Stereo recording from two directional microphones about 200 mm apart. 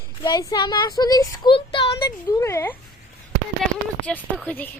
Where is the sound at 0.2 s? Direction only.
20° left (ahead or behind).